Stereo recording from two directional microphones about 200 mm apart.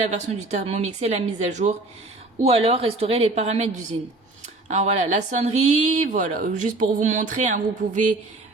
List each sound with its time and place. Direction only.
0.1 s a woman's voice: 35° right (ahead or behind)